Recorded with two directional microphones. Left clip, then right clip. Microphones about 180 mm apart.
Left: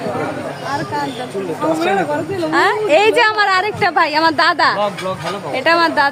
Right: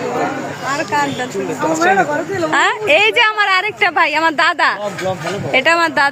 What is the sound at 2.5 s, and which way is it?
A woman's voice, 20° right (ahead or behind).